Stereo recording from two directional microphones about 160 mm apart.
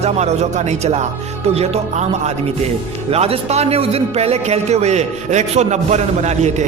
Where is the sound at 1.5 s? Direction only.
45° right (ahead or behind).